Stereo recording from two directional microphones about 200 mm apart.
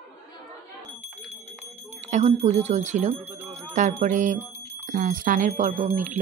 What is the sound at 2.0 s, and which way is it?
Speech, 35° right (ahead or behind).